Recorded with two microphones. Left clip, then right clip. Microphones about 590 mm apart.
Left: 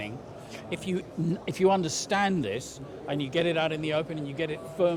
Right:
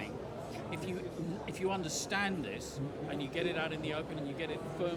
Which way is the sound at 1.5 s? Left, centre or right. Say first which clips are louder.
Left 13 dB; left.